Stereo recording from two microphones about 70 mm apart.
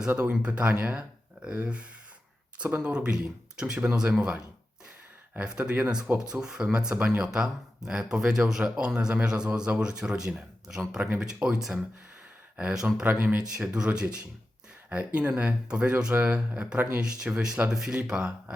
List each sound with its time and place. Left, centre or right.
0.1 s speech: centre
2.9 s speech: centre
5.5 s speech: centre